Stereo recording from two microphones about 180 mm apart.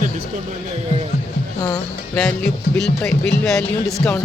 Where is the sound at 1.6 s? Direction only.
20° left (ahead or behind).